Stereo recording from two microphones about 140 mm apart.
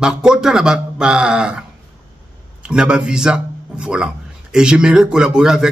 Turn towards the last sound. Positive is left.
turn(degrees=-5)  # may be behind; listen again after turning